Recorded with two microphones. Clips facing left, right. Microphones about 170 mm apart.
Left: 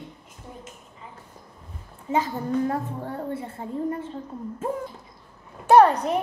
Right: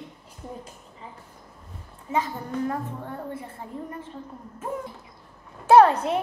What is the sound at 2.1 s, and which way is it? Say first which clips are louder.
A child's voice: left 3 dB; 35° left (ahead or behind).